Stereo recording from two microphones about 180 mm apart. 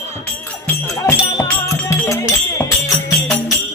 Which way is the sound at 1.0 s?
15° left (ahead or behind).